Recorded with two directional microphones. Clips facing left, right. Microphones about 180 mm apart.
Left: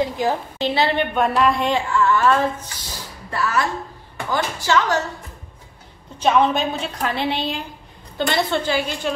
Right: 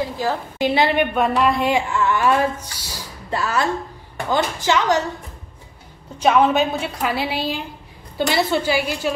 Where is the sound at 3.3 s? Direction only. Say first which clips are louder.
Right 1 dB; 25° right (ahead or behind).